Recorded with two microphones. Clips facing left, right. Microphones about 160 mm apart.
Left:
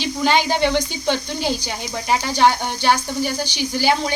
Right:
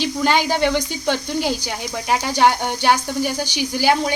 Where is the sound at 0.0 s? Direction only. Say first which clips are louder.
Even; 10° right (ahead or behind).